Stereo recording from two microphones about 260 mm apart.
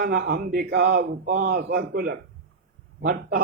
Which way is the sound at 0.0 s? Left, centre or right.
Right.